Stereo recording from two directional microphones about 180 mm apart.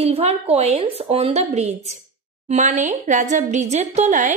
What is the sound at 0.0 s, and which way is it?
Speech, 35° right (ahead or behind).